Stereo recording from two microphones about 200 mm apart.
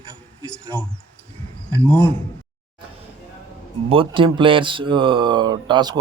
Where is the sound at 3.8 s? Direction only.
25° right (ahead or behind).